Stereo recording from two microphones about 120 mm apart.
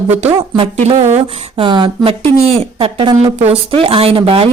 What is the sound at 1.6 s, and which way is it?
A woman's voice, 40° right (ahead or behind).